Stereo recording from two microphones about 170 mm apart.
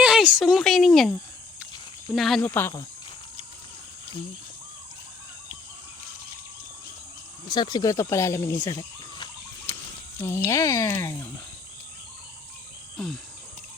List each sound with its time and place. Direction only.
0.0 s speech: 5° right (ahead or behind)
2.1 s speech: centre (ahead or behind)
2.4 s speech: 15° left (ahead or behind)
7.4 s speech: 25° left (ahead or behind)